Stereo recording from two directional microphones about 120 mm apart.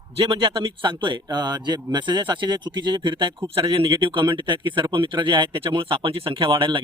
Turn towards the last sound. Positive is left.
turn(degrees=-45)  # may be behind; listen again after turning